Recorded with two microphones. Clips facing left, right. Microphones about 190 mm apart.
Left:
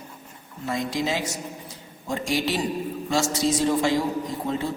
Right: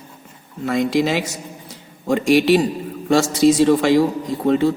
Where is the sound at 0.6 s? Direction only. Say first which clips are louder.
Right 8 dB; 70° right (ahead or behind).